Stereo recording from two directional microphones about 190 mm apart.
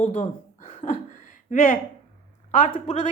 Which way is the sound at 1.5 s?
45° left (ahead or behind).